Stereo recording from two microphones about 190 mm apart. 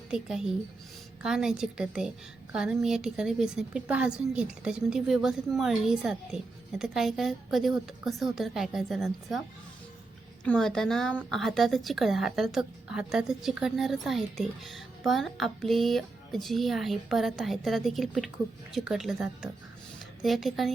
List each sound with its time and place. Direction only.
0.1 s a woman's voice: 5° right (ahead or behind)
10.4 s a woman's voice: 5° left (ahead or behind)